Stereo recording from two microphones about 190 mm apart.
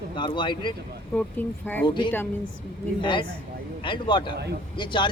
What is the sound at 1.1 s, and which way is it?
Speech, 10° left (ahead or behind).